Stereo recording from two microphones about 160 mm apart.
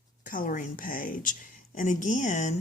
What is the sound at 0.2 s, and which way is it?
A woman's voice, 55° left (ahead or behind).